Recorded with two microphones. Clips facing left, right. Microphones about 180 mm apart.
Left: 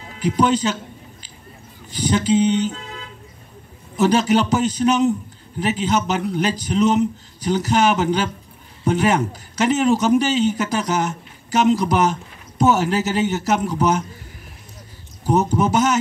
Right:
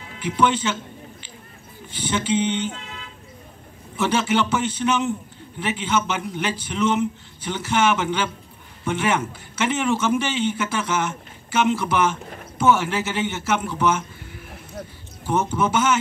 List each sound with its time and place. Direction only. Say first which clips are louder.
0.2 s a man's voice: left 3 dB; 40° left (ahead or behind)
1.9 s a man's voice: left 5 dB; 40° left (ahead or behind)
3.9 s a man's voice: left 5 dB; 40° left (ahead or behind)
15.2 s a man's voice: left 4 dB; 40° left (ahead or behind)